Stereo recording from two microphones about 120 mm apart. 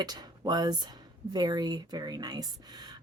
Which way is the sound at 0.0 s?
35° right (ahead or behind).